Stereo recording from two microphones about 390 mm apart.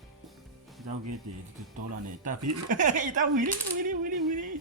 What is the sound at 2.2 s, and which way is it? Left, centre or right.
Coin, centre.